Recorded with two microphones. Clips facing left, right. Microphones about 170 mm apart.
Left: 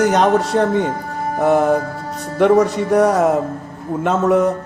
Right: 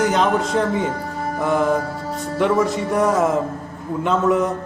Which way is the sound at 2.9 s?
40° left (ahead or behind).